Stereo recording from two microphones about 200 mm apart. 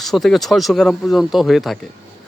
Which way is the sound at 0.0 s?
Centre (ahead or behind).